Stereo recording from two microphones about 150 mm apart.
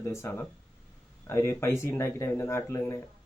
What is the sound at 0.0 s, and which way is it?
Speech, 20° left (ahead or behind).